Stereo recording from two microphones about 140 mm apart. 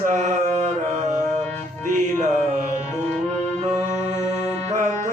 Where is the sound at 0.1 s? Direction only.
60° right (ahead or behind).